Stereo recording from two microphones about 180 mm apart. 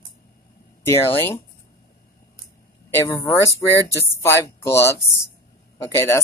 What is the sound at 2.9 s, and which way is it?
Speech, 15° left (ahead or behind).